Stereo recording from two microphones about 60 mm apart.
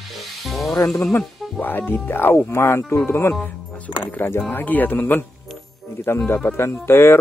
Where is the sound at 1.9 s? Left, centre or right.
Left.